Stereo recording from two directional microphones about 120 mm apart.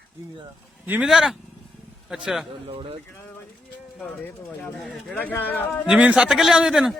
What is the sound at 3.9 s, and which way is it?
Speech, 5° left (ahead or behind).